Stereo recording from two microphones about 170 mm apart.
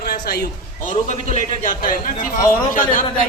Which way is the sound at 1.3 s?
50° left (ahead or behind).